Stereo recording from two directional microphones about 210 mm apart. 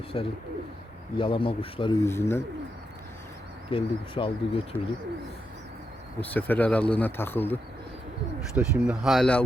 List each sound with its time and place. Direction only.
0.1 s speech: 25° left (ahead or behind)
2.0 s speech: 10° left (ahead or behind)
3.7 s speech: 25° left (ahead or behind)
6.1 s speech: 10° left (ahead or behind)
8.5 s speech: 5° right (ahead or behind)